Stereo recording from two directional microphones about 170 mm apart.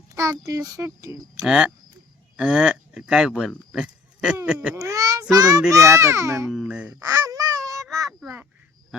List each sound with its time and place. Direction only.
0.1 s a child's voice: 20° right (ahead or behind)
1.4 s a child's voice: 5° right (ahead or behind)
4.7 s a child's voice: 20° right (ahead or behind)
6.5 s speech: 5° right (ahead or behind)
7.0 s honk: 20° right (ahead or behind)